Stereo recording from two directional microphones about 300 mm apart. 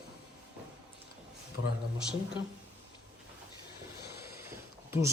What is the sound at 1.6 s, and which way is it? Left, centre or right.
Speech, left.